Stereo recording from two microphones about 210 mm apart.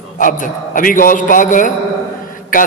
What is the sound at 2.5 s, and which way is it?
Mantra, 40° left (ahead or behind).